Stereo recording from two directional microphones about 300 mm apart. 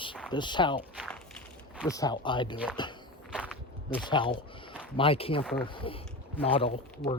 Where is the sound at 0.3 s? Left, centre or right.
Centre.